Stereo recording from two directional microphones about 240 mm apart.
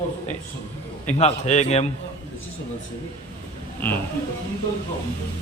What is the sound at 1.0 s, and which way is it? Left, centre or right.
Speech, left.